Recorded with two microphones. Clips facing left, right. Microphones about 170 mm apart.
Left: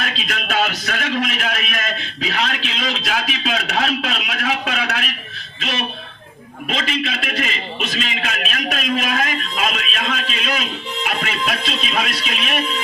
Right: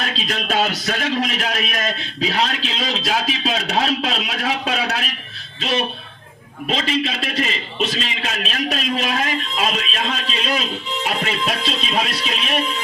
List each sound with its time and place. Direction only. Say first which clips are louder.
0.0 s a man's voice: right 1 dB; 35° right (ahead or behind)